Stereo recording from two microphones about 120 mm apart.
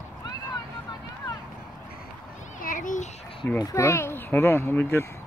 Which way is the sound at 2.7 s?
90° left.